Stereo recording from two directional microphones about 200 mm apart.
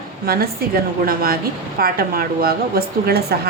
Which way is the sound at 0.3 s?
50° right (ahead or behind).